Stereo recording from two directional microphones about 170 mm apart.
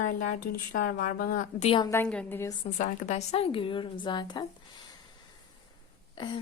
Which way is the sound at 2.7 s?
45° left (ahead or behind).